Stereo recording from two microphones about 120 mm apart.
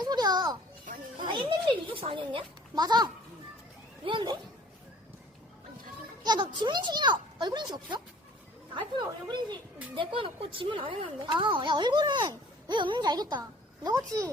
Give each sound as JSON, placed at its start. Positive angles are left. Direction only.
{"t": 0.0, "sound": "children playing", "side_deg": -35}
{"t": 1.2, "sound": "a sound", "side_deg": -45}
{"t": 4.0, "sound": "a woman's voice", "side_deg": -40}
{"t": 6.2, "sound": "a woman's voice", "side_deg": -40}